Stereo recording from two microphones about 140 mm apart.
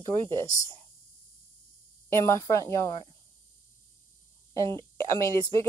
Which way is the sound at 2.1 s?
20° left (ahead or behind).